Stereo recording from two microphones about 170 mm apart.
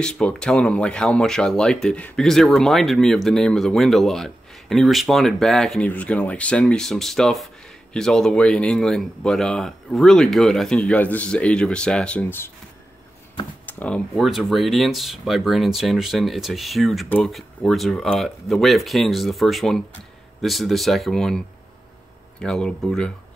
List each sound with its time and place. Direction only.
0.0 s speech: 5° left (ahead or behind)
13.7 s speech: 10° left (ahead or behind)